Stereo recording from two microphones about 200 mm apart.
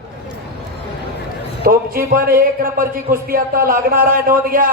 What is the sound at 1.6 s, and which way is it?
A man's voice, 45° right (ahead or behind).